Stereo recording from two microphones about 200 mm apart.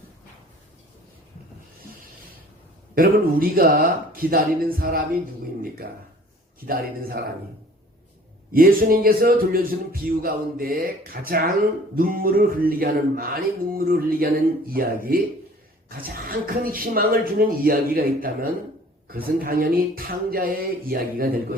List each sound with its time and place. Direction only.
2.9 s speech: 45° right (ahead or behind)
8.5 s speech: 45° right (ahead or behind)